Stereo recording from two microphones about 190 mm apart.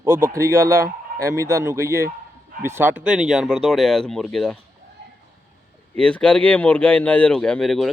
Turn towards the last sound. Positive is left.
turn(degrees=0)  # may be behind; listen again after turning